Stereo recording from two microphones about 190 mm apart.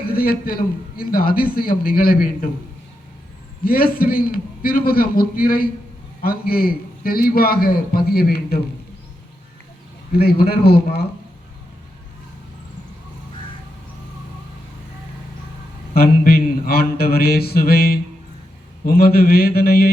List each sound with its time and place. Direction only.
0.1 s a man's voice: 50° left (ahead or behind)
3.6 s a man's voice: 50° left (ahead or behind)
10.2 s a man's voice: 55° left (ahead or behind)
16.0 s a man's voice: 50° left (ahead or behind)